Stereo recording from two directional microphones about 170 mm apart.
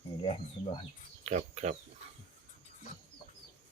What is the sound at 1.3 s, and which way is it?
Speech, 40° right (ahead or behind).